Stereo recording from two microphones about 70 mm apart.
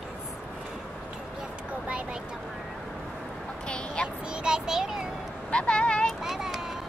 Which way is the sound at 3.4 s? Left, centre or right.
Centre.